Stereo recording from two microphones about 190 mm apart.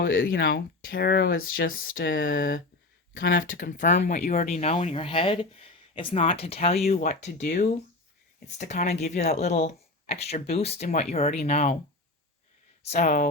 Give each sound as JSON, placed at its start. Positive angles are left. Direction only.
{"t": 0.0, "sound": "speech", "side_deg": 50}
{"t": 3.2, "sound": "speech", "side_deg": 50}
{"t": 12.8, "sound": "speech", "side_deg": 35}